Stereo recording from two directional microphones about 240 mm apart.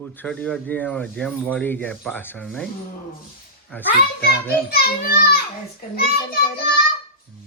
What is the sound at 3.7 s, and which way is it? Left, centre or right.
Speech, centre.